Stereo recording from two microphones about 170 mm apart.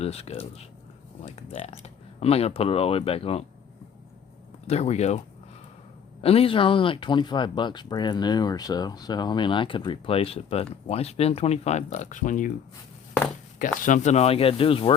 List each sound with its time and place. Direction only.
0.0 s speech: 35° left (ahead or behind)
4.6 s speech: 40° left (ahead or behind)
6.2 s speech: 35° left (ahead or behind)
13.6 s speech: 50° left (ahead or behind); by 14.9 s 30° left (ahead or behind)